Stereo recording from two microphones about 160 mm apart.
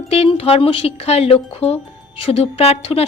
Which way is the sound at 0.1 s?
35° left (ahead or behind).